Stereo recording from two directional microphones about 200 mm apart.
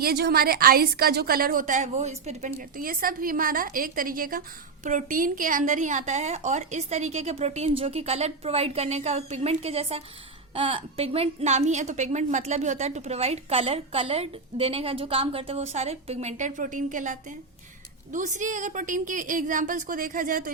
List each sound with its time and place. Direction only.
0.0 s a woman's voice: 50° right (ahead or behind)